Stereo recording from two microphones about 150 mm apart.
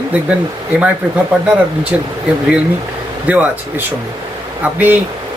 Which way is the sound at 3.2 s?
10° right (ahead or behind).